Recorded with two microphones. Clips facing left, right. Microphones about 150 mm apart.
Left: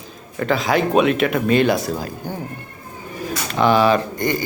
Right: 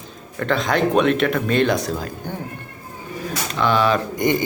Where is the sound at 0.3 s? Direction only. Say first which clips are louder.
Left 1 dB; 5° left (ahead or behind).